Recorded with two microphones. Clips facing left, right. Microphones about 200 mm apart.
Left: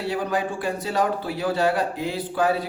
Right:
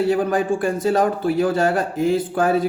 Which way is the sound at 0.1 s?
50° right (ahead or behind).